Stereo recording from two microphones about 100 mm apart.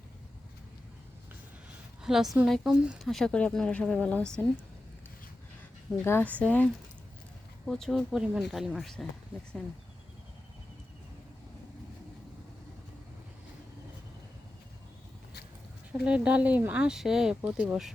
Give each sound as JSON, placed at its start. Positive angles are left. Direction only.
{"t": 2.0, "sound": "speech", "side_deg": -5}
{"t": 6.1, "sound": "speech", "side_deg": 15}
{"t": 7.6, "sound": "speech", "side_deg": 0}
{"t": 15.9, "sound": "speech", "side_deg": -10}